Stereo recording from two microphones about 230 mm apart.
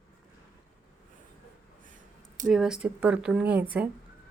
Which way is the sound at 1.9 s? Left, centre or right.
Right.